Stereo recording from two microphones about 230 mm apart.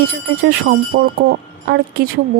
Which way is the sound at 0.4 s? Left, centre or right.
Right.